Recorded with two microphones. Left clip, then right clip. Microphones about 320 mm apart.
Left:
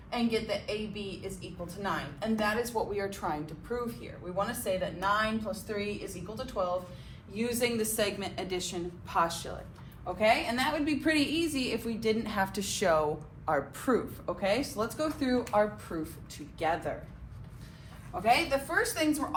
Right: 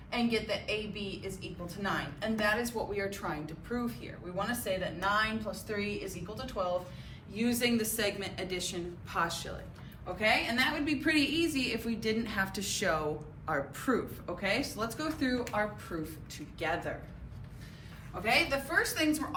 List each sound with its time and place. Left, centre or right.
0.1 s a woman's voice: centre; by 16.9 s left
18.1 s a woman's voice: centre